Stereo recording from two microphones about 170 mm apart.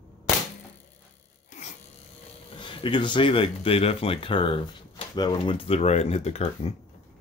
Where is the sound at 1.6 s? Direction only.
45° left (ahead or behind).